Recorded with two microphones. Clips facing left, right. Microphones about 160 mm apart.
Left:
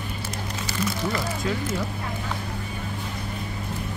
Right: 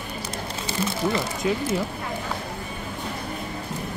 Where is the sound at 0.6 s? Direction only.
25° right (ahead or behind).